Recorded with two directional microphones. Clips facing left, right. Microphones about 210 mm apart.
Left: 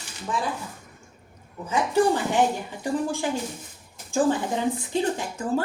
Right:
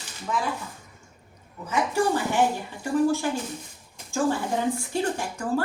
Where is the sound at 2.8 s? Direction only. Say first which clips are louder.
Right 3 dB; 15° left (ahead or behind).